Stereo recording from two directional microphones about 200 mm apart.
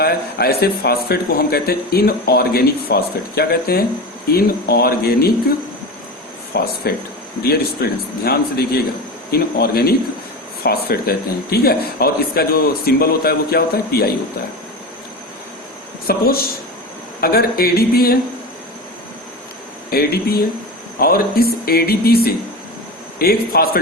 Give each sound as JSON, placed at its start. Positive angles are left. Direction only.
{"t": 0.0, "sound": "speech", "side_deg": 50}
{"t": 6.5, "sound": "speech", "side_deg": 50}
{"t": 16.0, "sound": "speech", "side_deg": 50}
{"t": 19.9, "sound": "speech", "side_deg": 50}